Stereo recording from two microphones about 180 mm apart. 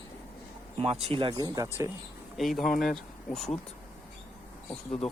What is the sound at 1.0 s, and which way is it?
Speech, 30° right (ahead or behind).